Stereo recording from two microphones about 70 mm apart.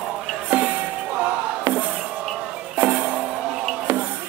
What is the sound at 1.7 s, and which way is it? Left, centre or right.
Music, right.